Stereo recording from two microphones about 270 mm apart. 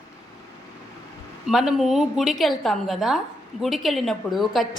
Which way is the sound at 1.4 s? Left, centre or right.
Centre.